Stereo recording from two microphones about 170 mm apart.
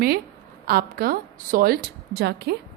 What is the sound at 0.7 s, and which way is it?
A woman's voice, 60° right (ahead or behind).